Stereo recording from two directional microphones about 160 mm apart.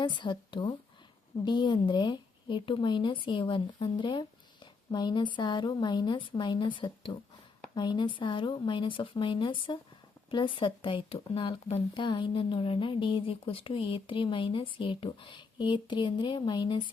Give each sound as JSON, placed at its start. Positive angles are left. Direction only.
{"t": 0.0, "sound": "a woman's voice", "side_deg": 30}